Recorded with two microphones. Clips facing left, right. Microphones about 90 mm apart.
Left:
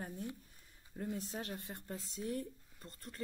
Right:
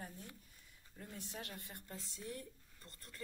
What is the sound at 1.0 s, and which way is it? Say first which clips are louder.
A woman's voice: left 8 dB; 35° left (ahead or behind).